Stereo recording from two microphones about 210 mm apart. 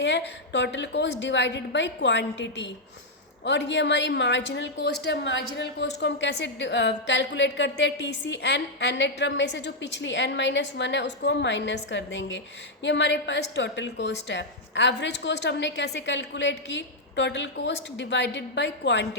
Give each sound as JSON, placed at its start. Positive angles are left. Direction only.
{"t": 0.0, "sound": "a woman's voice", "side_deg": 55}